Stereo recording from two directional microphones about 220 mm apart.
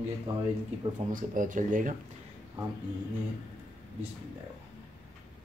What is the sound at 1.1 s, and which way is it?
Speech, 35° right (ahead or behind).